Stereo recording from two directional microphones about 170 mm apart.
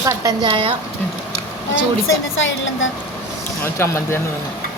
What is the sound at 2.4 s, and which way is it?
Speech, 90° left.